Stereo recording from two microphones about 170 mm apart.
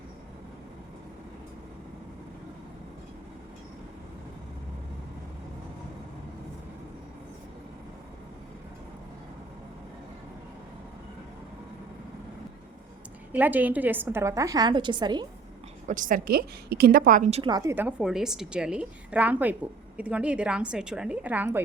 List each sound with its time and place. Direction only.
13.3 s a woman's voice: 10° right (ahead or behind); by 15.3 s 25° right (ahead or behind)
15.9 s a woman's voice: 50° right (ahead or behind)
17.5 s a woman's voice: 15° right (ahead or behind)